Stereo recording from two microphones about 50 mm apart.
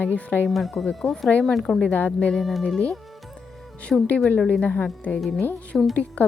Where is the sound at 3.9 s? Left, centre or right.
Centre.